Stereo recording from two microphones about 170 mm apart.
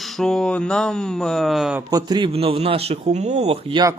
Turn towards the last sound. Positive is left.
turn(degrees=-35)  # may be behind; listen again after turning